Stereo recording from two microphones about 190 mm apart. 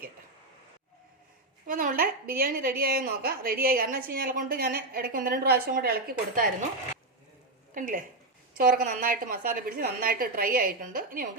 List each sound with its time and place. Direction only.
1.6 s a woman's voice: 45° right (ahead or behind)
7.7 s a woman's voice: 45° right (ahead or behind)